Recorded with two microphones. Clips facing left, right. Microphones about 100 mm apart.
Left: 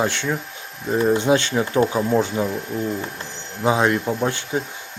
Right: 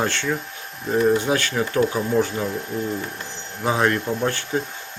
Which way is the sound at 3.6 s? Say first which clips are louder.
Left 2 dB; 15° left (ahead or behind).